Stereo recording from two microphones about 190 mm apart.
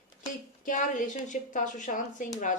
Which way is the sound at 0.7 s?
40° left (ahead or behind).